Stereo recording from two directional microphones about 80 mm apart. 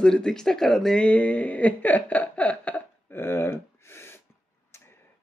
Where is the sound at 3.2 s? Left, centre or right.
Left.